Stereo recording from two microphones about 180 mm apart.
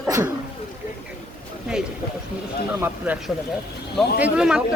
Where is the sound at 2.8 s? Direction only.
10° right (ahead or behind).